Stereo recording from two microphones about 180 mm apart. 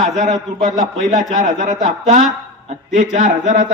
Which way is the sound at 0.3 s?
40° right (ahead or behind).